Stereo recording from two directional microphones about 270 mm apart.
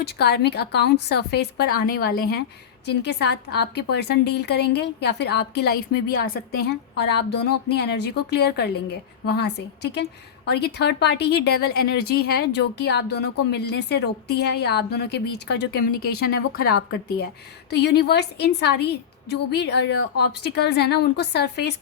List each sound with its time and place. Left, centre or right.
0.0 s speech: left
11.7 s speech: left
12.0 s speech: left